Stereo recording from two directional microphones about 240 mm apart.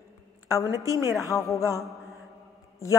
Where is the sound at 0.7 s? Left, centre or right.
Centre.